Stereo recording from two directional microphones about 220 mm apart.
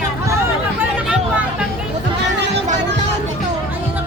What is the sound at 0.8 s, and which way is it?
Hubbub, 5° right (ahead or behind).